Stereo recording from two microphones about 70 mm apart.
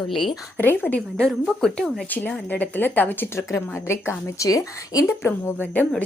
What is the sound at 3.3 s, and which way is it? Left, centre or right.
A woman's voice, left.